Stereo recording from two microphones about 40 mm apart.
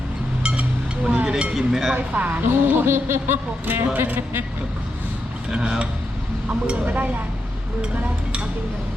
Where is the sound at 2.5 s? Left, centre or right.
Right.